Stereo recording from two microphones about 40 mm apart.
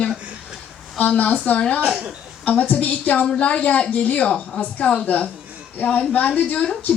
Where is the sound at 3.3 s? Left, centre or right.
Left.